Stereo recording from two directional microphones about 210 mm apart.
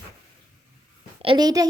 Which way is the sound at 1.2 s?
20° right (ahead or behind).